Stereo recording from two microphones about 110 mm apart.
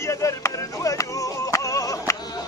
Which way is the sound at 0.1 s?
30° left (ahead or behind).